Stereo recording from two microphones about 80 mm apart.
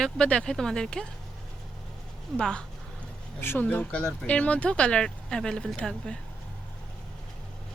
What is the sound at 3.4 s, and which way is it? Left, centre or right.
Speech, left.